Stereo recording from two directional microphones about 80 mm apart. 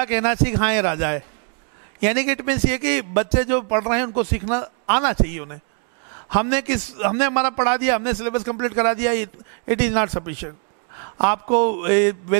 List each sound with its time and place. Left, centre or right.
0.0 s a man's voice: centre